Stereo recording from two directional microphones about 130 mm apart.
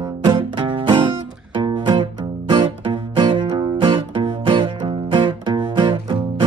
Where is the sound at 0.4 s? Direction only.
40° right (ahead or behind).